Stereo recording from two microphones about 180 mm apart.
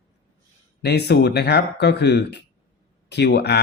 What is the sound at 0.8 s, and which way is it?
Speech, 65° left (ahead or behind).